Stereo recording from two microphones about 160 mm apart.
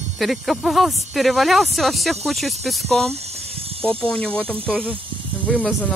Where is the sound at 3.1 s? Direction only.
40° right (ahead or behind).